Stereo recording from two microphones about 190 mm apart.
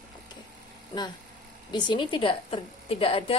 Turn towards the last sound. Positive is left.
turn(degrees=30)  # may be behind; listen again after turning